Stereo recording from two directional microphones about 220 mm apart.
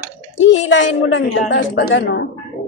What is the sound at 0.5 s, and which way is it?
A woman's voice, 60° left (ahead or behind).